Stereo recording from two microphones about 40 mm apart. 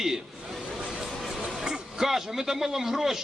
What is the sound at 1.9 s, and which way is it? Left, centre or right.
A man's voice, centre.